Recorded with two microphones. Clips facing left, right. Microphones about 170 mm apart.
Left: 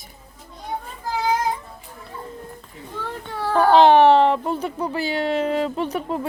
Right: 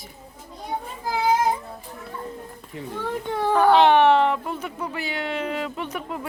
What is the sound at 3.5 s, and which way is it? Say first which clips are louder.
Speech: left 3 dB; 35° left (ahead or behind).